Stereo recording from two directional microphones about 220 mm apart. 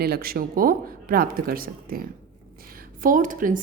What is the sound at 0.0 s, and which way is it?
A woman's voice, 45° right (ahead or behind).